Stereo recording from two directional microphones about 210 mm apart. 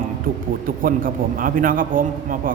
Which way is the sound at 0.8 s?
40° right (ahead or behind).